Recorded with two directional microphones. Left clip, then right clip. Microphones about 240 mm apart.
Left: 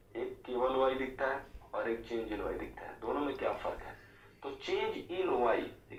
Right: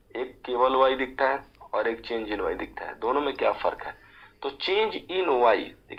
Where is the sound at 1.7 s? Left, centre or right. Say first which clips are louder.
Right 9 dB; right.